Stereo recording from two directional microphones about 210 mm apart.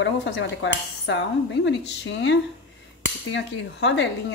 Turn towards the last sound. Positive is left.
turn(degrees=55)  # may be behind; listen again after turning